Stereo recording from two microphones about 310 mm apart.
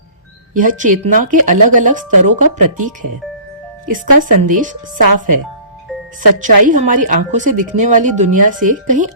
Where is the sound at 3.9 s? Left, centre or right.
Right.